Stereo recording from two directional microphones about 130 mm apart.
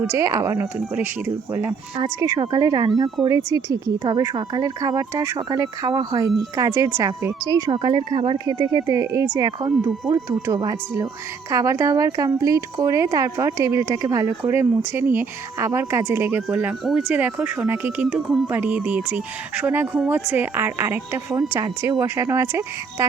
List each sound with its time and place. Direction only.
0.2 s speech: 25° right (ahead or behind)
7.4 s speech: 35° right (ahead or behind)
8.4 s speech: 30° right (ahead or behind)